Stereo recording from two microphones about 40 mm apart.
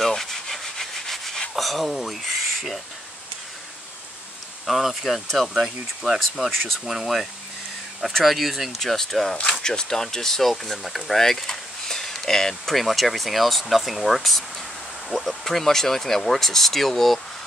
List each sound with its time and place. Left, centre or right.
0.0 s rub: centre
1.5 s speech: centre
4.6 s speech: centre
8.8 s speech: centre
9.6 s speech: centre
12.7 s speech: centre